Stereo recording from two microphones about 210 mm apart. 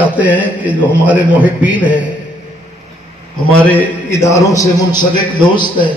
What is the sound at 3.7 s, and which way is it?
A man's voice, 15° left (ahead or behind).